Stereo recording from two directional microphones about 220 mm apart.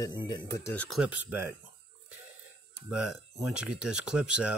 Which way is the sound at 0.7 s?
Centre (ahead or behind).